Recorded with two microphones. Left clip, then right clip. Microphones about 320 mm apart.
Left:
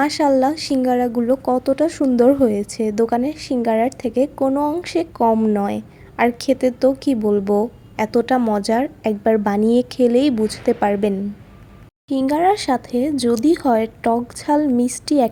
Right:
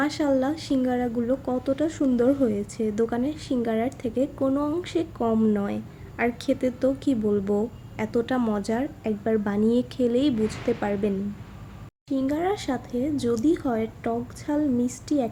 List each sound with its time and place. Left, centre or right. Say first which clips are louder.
0.0 s speech: left 8 dB; left
12.1 s speech: left 9 dB; left